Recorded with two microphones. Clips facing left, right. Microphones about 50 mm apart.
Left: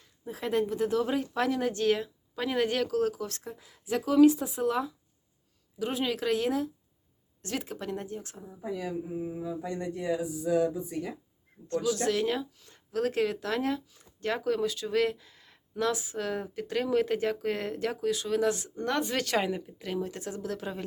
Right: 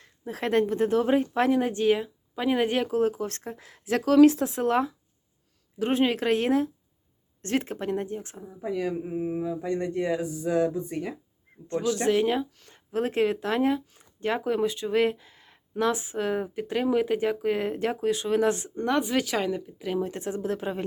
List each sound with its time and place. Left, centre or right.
0.0 s speech: right
3.6 s speech: right
4.6 s a sound: right
5.8 s speech: right
8.6 s speech: right
9.1 s a sound: right
11.5 s a sound: right
11.9 s speech: right
17.7 s speech: right
18.9 s speech: centre
19.4 s a woman's voice: centre
20.0 s speech: right